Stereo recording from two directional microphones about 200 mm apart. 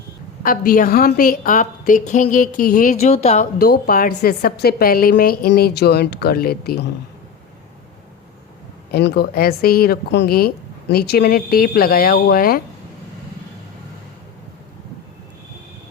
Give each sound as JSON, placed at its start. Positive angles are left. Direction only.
{"t": 0.4, "sound": "a woman's voice", "side_deg": 45}
{"t": 2.9, "sound": "speech", "side_deg": 30}
{"t": 3.6, "sound": "a woman's voice", "side_deg": 50}
{"t": 8.9, "sound": "a woman's voice", "side_deg": 55}